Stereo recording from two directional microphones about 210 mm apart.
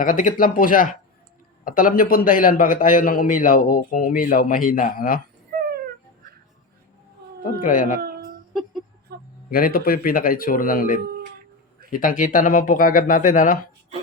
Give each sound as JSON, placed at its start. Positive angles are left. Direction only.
{"t": 0.0, "sound": "a man's voice", "side_deg": 40}
{"t": 7.4, "sound": "a man's voice", "side_deg": 40}
{"t": 8.0, "sound": "a sound", "side_deg": -45}
{"t": 9.5, "sound": "a man's voice", "side_deg": 45}